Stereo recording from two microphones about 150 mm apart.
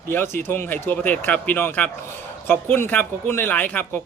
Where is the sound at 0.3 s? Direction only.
15° left (ahead or behind).